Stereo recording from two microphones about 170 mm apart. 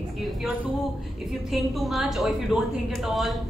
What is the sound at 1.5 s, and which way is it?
A woman's voice, centre (ahead or behind).